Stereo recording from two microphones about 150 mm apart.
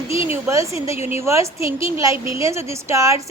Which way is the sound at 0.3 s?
20° right (ahead or behind).